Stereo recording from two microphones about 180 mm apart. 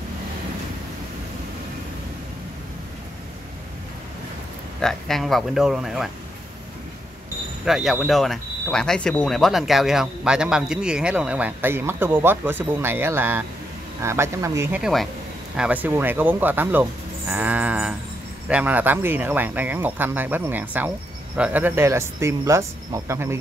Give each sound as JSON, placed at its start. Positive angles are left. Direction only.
{"t": 4.8, "sound": "speech", "side_deg": 0}
{"t": 7.6, "sound": "speech", "side_deg": 0}
{"t": 14.8, "sound": "speech", "side_deg": 0}